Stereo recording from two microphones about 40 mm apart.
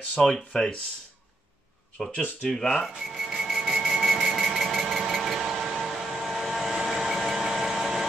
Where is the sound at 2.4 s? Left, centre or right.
Centre.